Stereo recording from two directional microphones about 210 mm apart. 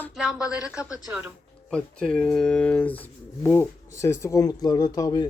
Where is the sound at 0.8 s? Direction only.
15° left (ahead or behind).